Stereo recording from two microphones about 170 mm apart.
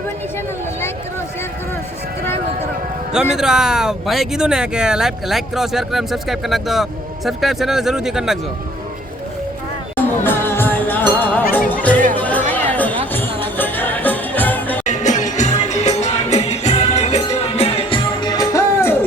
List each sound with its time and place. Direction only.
3.1 s speech: 5° right (ahead or behind)
10.2 s music: 10° left (ahead or behind)
14.8 s music: 45° left (ahead or behind); by 18.9 s 15° left (ahead or behind)